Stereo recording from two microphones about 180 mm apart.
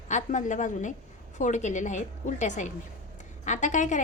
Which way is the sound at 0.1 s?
45° left (ahead or behind).